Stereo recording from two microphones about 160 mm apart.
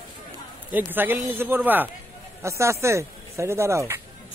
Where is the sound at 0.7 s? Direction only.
10° right (ahead or behind).